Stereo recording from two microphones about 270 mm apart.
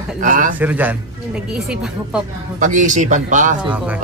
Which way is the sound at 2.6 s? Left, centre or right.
Right.